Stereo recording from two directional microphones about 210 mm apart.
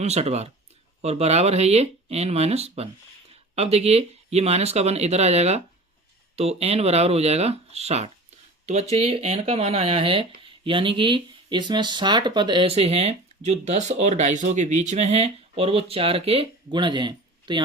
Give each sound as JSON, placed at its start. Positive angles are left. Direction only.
{"t": 0.0, "sound": "speech", "side_deg": -30}